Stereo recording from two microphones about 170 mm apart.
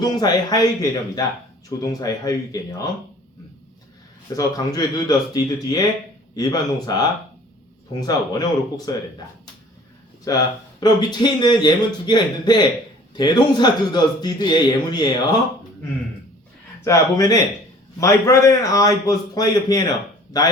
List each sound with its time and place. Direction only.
0.0 s a man's voice: 25° left (ahead or behind)
4.4 s a man's voice: 20° left (ahead or behind)
10.2 s a man's voice: 20° left (ahead or behind)
16.8 s a man's voice: 20° left (ahead or behind)